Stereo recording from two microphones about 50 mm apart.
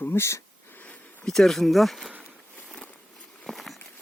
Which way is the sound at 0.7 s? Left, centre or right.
Left.